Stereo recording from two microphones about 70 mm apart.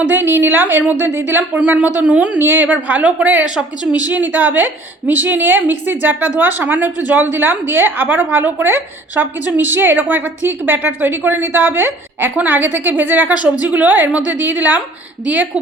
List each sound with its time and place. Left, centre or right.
0.0 s a woman's voice: right
2.4 s a woman's voice: right